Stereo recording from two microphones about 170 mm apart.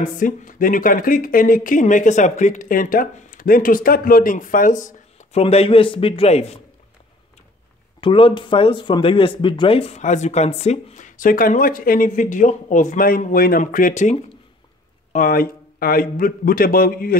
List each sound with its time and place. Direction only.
0.0 s speech: 50° left (ahead or behind)
5.4 s a man's voice: 35° left (ahead or behind)
8.0 s speech: 30° left (ahead or behind); by 14.1 s 50° left (ahead or behind)
15.1 s a man's voice: 55° left (ahead or behind)